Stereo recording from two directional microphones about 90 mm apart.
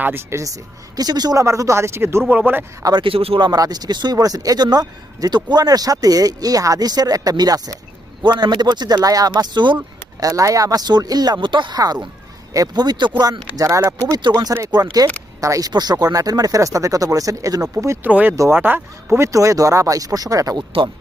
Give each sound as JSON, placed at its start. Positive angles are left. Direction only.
{"t": 0.0, "sound": "speech", "side_deg": -25}
{"t": 3.0, "sound": "speech", "side_deg": -90}
{"t": 3.5, "sound": "speech", "side_deg": -45}
{"t": 8.2, "sound": "speech", "side_deg": -55}
{"t": 9.7, "sound": "speech", "side_deg": -40}
{"t": 13.6, "sound": "speech", "side_deg": -40}
{"t": 14.2, "sound": "speech", "side_deg": -55}
{"t": 15.4, "sound": "speech", "side_deg": -40}
{"t": 15.7, "sound": "speech", "side_deg": -50}
{"t": 18.0, "sound": "speech", "side_deg": -20}